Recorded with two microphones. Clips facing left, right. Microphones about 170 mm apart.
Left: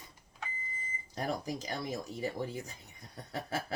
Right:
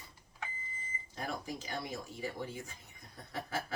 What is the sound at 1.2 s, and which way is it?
Speech, 40° left (ahead or behind).